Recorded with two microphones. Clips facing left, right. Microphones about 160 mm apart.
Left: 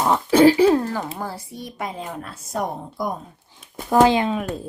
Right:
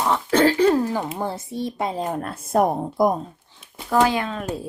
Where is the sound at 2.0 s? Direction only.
45° right (ahead or behind).